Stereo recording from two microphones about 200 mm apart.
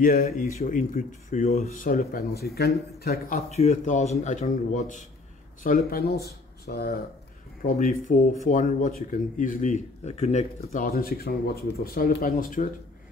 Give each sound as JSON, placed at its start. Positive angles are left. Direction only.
{"t": 0.0, "sound": "speech", "side_deg": 45}
{"t": 3.3, "sound": "speech", "side_deg": 35}
{"t": 5.9, "sound": "speech", "side_deg": 50}